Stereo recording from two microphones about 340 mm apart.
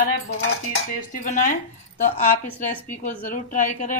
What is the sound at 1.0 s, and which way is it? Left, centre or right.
Speech, left.